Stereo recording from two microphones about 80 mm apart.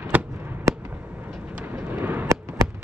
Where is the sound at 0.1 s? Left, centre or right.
Right.